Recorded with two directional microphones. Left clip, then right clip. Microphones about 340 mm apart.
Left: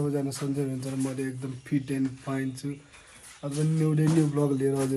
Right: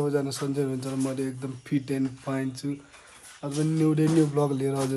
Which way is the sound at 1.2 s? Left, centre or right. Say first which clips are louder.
Right 2 dB; centre.